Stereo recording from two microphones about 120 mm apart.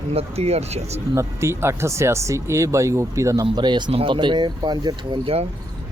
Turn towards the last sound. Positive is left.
turn(degrees=-35)  # may be behind; listen again after turning